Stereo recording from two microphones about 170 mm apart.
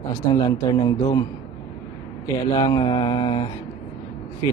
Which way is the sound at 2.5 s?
25° left (ahead or behind).